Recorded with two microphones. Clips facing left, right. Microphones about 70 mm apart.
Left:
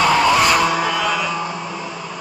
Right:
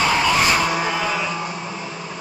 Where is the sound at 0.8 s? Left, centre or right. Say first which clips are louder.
Left 3 dB; left.